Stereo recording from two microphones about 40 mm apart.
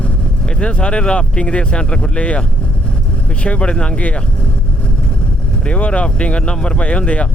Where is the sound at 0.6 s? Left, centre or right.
Left.